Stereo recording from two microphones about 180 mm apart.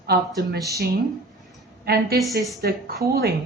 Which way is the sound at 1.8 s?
60° right (ahead or behind).